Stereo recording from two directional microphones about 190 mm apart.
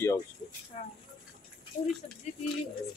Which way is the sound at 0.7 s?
35° left (ahead or behind).